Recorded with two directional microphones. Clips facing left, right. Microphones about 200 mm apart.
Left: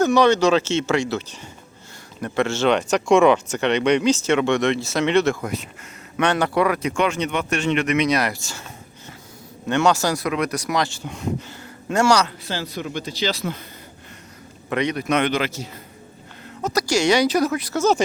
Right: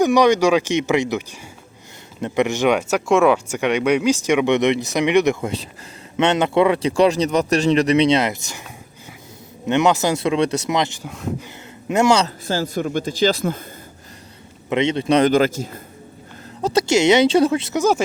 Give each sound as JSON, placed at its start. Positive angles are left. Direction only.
{"t": 0.0, "sound": "speech", "side_deg": -15}
{"t": 11.0, "sound": "speech", "side_deg": 0}
{"t": 11.4, "sound": "speech", "side_deg": -20}
{"t": 12.5, "sound": "speech", "side_deg": -45}
{"t": 14.7, "sound": "speech", "side_deg": -25}
{"t": 15.3, "sound": "speech", "side_deg": -45}
{"t": 16.6, "sound": "speech", "side_deg": -25}